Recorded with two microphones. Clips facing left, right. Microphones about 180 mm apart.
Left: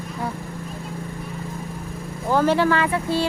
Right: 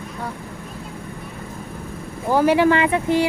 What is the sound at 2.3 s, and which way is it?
Speech, 15° right (ahead or behind).